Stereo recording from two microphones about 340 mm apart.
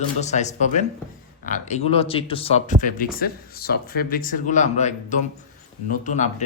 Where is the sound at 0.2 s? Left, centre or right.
Centre.